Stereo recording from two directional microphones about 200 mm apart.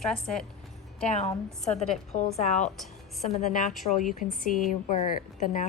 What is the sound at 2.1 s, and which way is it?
Speech, 35° left (ahead or behind).